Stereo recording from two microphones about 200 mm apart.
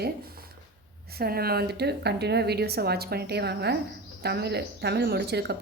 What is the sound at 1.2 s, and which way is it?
A woman's voice, 50° right (ahead or behind).